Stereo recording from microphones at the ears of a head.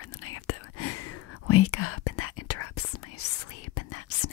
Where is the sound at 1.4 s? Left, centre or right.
Left.